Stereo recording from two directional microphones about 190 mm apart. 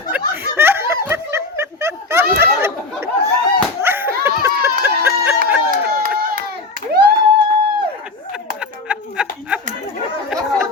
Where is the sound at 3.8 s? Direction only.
10° right (ahead or behind).